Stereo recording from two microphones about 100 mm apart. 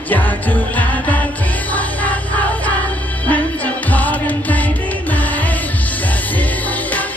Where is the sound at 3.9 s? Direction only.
15° left (ahead or behind).